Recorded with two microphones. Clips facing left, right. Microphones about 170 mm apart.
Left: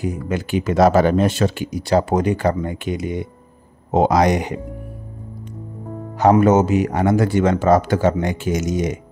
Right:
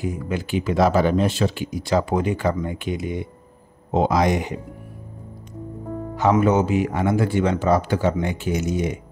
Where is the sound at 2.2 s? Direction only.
65° left (ahead or behind); by 4.6 s 80° left.